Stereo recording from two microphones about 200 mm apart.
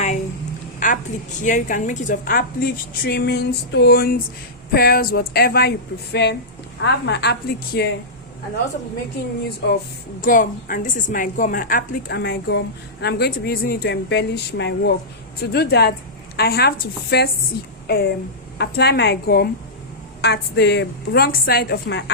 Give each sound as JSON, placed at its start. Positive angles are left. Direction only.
{"t": 0.8, "sound": "a woman's voice", "side_deg": 40}
{"t": 10.2, "sound": "a woman's voice", "side_deg": 45}